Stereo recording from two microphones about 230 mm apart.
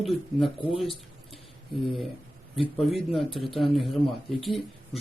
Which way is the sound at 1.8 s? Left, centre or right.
Centre.